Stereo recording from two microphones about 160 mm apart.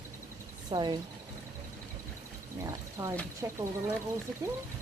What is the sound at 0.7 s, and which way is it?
Speech, 30° right (ahead or behind).